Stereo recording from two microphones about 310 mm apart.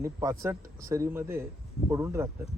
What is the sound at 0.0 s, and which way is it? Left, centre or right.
Speech, centre.